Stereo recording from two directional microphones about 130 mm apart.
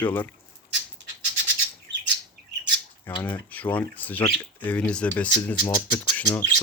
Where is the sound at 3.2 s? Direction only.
10° left (ahead or behind).